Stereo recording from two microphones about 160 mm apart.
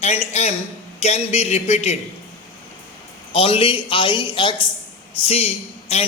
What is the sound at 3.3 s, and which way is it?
A man's voice, 35° left (ahead or behind).